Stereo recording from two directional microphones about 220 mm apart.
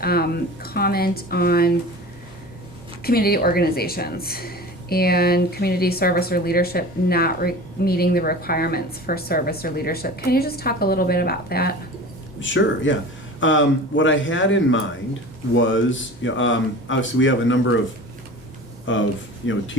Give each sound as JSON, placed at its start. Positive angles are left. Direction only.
{"t": 0.0, "sound": "speech", "side_deg": 45}
{"t": 3.0, "sound": "speech", "side_deg": 45}
{"t": 12.4, "sound": "speech", "side_deg": 60}
{"t": 18.9, "sound": "speech", "side_deg": 60}